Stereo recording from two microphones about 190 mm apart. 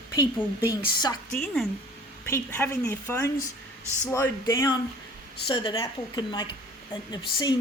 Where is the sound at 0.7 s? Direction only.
20° left (ahead or behind).